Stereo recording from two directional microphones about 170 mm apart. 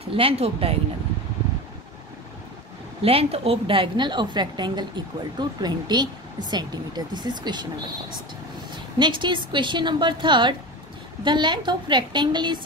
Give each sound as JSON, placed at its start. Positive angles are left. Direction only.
{"t": 0.1, "sound": "speech", "side_deg": -35}
{"t": 3.0, "sound": "a woman's voice", "side_deg": -35}
{"t": 8.9, "sound": "a woman's voice", "side_deg": -25}